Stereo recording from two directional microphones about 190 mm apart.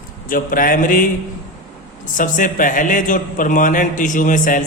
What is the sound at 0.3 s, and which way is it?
Speech, 45° left (ahead or behind).